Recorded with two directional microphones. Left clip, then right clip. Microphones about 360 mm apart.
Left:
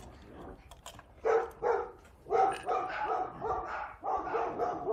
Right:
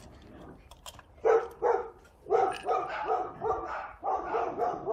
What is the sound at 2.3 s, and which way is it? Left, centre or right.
Dog, centre.